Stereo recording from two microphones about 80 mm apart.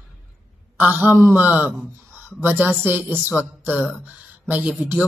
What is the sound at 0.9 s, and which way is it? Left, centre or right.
Speech, right.